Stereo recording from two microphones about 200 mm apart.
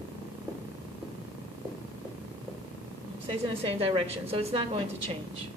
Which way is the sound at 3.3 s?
25° right (ahead or behind).